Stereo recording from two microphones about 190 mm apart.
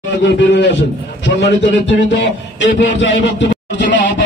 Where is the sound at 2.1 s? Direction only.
70° left (ahead or behind).